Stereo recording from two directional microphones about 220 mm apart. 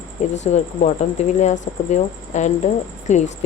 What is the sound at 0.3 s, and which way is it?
Speech, 30° left (ahead or behind).